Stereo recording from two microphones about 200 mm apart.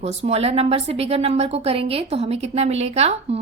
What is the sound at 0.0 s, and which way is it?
A woman's voice, 35° right (ahead or behind).